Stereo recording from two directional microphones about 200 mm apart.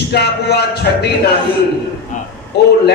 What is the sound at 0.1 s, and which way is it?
Speech, 55° left (ahead or behind).